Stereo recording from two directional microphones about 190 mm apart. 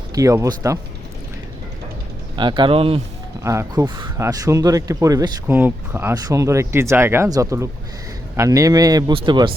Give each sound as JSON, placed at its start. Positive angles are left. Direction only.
{"t": 0.1, "sound": "speech", "side_deg": -15}
{"t": 2.3, "sound": "speech", "side_deg": -25}
{"t": 3.4, "sound": "speech", "side_deg": -15}